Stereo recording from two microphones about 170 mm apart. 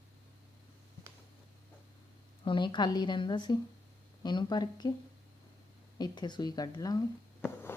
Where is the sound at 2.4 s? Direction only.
30° left (ahead or behind).